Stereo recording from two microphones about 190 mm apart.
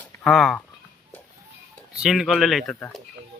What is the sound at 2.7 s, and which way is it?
Speech, 10° left (ahead or behind).